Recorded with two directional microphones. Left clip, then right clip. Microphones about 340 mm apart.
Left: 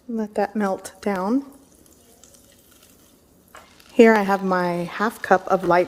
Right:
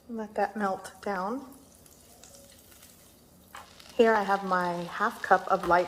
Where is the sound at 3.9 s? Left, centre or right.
Left.